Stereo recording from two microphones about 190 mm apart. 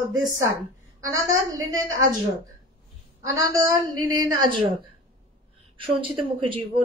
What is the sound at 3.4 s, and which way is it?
Speech, 20° right (ahead or behind).